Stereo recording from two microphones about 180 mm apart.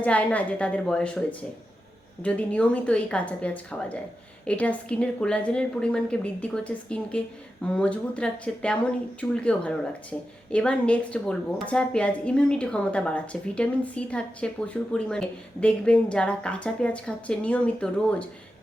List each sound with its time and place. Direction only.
0.0 s a woman's voice: 10° left (ahead or behind)